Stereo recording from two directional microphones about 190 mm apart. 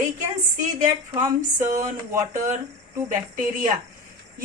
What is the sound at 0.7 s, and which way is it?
Speech, 20° right (ahead or behind).